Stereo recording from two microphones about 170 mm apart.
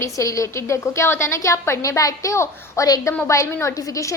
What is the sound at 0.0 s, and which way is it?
A woman's voice, 20° left (ahead or behind).